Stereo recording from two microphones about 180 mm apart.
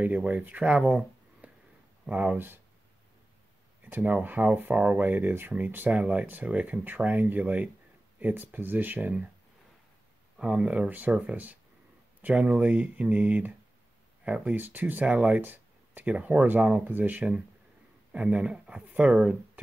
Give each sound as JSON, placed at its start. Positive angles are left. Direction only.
{"t": 0.0, "sound": "speech", "side_deg": -10}
{"t": 3.8, "sound": "speech", "side_deg": -10}
{"t": 10.4, "sound": "speech", "side_deg": -5}